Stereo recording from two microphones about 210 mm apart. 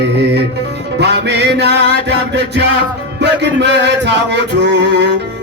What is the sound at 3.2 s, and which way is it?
Music, 55° right (ahead or behind).